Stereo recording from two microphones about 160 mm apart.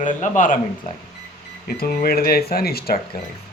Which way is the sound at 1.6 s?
70° left (ahead or behind).